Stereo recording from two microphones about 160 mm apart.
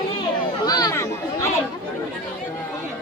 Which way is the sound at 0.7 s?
25° left (ahead or behind).